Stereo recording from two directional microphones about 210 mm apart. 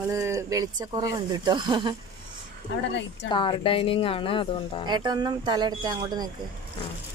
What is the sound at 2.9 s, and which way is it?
Speech, 55° left (ahead or behind).